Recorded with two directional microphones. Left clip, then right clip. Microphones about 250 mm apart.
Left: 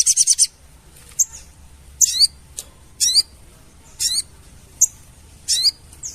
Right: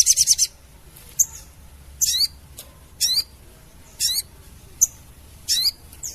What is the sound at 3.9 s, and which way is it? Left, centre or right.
Squawk, centre.